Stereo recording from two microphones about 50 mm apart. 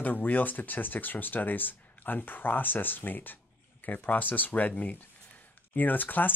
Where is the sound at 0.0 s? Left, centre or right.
Left.